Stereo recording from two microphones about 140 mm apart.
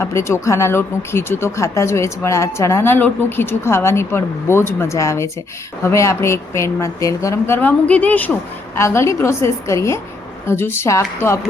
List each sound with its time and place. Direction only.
0.0 s speech: 20° left (ahead or behind)